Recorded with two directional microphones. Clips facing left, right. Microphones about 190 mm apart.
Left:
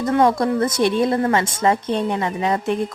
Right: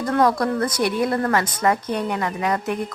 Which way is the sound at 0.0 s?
25° left (ahead or behind).